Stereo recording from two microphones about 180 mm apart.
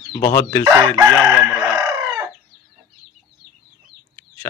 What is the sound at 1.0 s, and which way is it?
Chicken, 15° right (ahead or behind).